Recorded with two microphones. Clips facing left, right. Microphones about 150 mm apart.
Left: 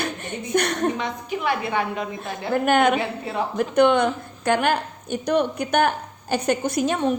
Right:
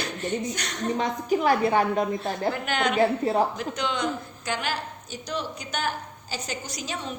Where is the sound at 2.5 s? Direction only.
50° left (ahead or behind).